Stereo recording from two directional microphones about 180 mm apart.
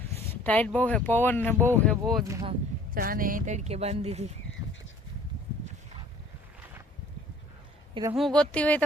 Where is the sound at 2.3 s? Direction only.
25° right (ahead or behind).